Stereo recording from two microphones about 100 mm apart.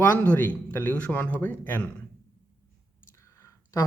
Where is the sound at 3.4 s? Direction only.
30° left (ahead or behind).